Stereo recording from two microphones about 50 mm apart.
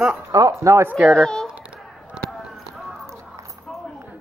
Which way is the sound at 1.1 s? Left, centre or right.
Centre.